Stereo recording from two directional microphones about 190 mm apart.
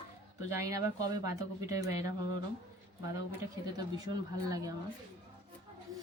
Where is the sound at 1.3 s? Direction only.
15° right (ahead or behind).